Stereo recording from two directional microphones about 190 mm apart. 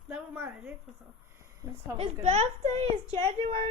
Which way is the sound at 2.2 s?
35° right (ahead or behind).